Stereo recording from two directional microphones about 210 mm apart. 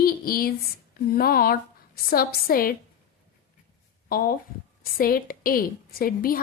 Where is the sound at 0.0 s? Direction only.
45° left (ahead or behind).